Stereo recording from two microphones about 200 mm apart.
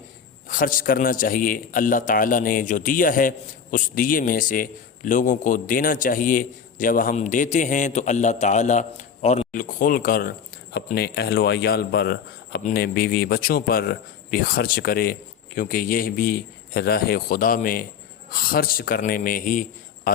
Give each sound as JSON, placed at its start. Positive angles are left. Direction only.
{"t": 0.4, "sound": "a man's voice", "side_deg": 45}